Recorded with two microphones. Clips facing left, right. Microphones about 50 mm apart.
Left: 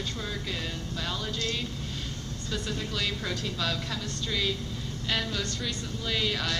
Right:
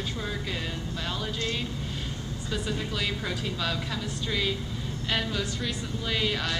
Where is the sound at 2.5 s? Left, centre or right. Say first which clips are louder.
Right 2 dB; centre.